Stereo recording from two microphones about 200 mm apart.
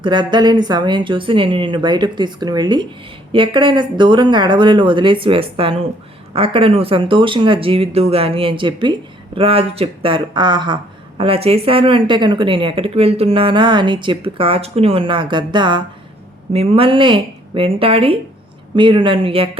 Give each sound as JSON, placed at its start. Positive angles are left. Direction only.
{"t": 0.0, "sound": "speech", "side_deg": -25}